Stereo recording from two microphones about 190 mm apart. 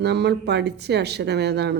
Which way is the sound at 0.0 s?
60° right (ahead or behind).